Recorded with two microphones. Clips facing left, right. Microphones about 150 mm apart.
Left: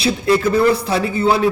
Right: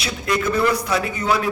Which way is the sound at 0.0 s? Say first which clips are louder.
Left 7 dB; 30° left (ahead or behind).